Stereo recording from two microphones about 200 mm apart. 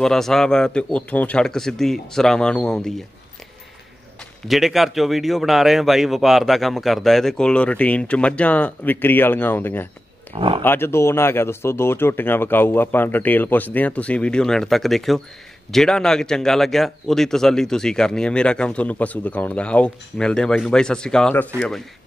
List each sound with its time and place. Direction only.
0.0 s speech: centre (ahead or behind)
4.5 s speech: centre (ahead or behind)
10.3 s speech: 25° right (ahead or behind)
10.6 s speech: 10° left (ahead or behind)